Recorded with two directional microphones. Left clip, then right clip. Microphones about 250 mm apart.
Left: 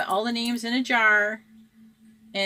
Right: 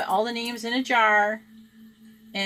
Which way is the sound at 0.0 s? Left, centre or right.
Left.